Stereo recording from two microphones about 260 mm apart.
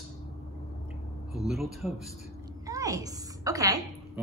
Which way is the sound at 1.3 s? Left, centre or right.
Centre.